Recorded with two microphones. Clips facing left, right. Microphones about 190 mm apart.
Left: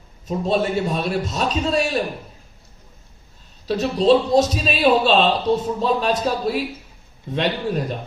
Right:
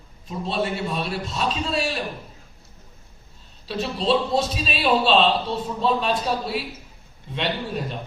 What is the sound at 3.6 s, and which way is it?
A man's voice, 40° left (ahead or behind).